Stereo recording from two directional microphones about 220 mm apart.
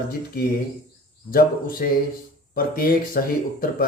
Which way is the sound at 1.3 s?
40° left (ahead or behind).